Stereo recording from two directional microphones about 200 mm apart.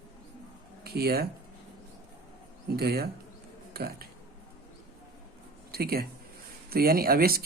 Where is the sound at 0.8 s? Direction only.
50° right (ahead or behind).